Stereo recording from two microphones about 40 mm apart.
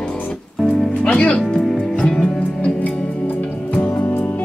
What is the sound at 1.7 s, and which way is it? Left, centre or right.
Music, centre.